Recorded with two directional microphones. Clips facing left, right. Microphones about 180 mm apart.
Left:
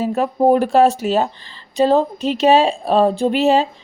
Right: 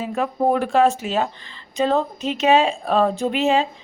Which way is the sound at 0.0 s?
40° left (ahead or behind).